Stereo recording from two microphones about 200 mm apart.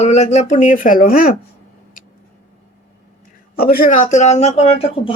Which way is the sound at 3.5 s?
50° left (ahead or behind).